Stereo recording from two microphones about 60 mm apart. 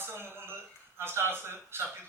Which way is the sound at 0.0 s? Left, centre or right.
Right.